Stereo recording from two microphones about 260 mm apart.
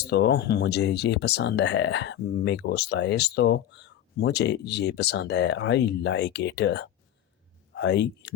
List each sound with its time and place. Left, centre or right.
0.1 s speech: left